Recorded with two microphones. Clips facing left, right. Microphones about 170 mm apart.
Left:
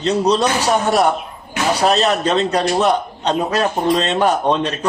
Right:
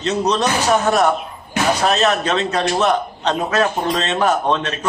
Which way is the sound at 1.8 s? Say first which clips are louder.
Left 4 dB; 35° left (ahead or behind).